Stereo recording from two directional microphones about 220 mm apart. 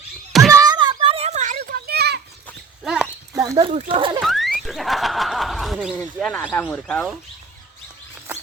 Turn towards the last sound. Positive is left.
turn(degrees=5)  # may be behind; listen again after turning